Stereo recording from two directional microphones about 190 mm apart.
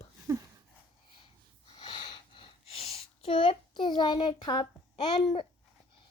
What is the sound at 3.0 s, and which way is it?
A child's voice, 30° left (ahead or behind).